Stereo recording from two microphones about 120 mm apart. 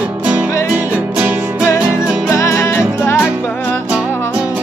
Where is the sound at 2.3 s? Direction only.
25° left (ahead or behind).